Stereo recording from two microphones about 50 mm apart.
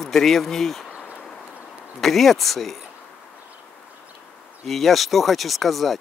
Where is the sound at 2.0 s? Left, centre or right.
Centre.